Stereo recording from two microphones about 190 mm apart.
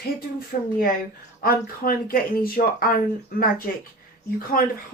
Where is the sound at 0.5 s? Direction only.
45° left (ahead or behind).